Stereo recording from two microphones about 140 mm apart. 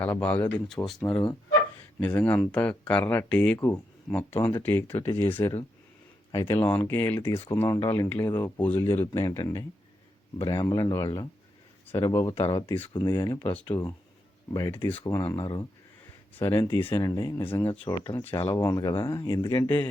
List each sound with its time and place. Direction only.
0.0 s speech: 10° left (ahead or behind); by 6.6 s 25° left (ahead or behind)
6.6 s speech: 15° left (ahead or behind)
12.6 s speech: 15° left (ahead or behind)
15.4 s speech: 35° left (ahead or behind)
16.3 s speech: 15° left (ahead or behind)
16.6 s speech: 30° left (ahead or behind)
16.8 s speech: 20° left (ahead or behind)